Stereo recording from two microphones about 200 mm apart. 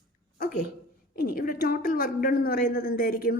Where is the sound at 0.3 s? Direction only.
45° left (ahead or behind).